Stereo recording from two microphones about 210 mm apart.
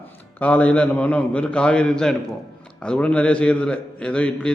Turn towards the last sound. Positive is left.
turn(degrees=5)  # may be behind; listen again after turning